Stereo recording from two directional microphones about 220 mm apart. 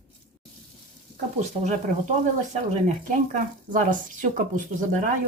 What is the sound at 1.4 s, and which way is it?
Speech, 35° right (ahead or behind).